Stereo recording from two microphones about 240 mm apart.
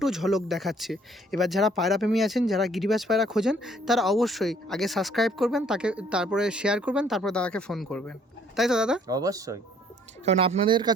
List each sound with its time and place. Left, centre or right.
0.0 s speech: centre
9.0 s speech: centre
10.2 s speech: right